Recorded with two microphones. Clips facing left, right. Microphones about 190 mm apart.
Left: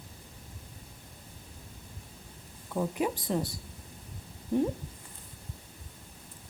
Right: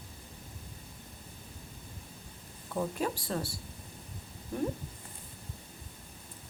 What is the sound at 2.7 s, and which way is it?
Speech, 15° left (ahead or behind).